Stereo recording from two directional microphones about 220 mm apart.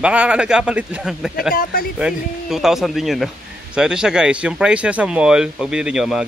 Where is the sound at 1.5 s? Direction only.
40° left (ahead or behind).